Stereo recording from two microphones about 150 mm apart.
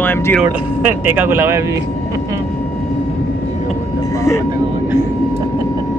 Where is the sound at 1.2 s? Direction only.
15° right (ahead or behind).